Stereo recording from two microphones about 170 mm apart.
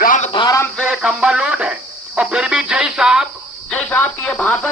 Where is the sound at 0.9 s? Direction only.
5° right (ahead or behind).